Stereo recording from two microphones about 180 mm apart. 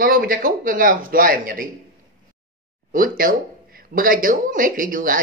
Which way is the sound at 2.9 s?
50° right (ahead or behind).